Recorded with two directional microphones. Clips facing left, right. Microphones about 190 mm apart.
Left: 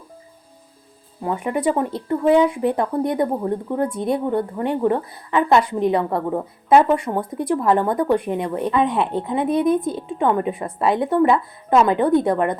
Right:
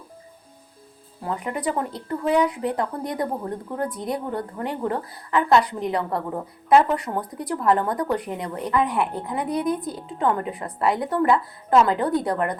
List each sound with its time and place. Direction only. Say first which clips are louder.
1.2 s speech: left 6 dB; 20° left (ahead or behind)